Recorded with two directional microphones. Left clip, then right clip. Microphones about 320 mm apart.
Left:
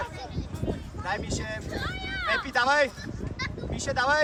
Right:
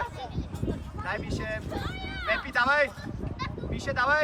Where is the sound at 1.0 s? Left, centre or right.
Centre.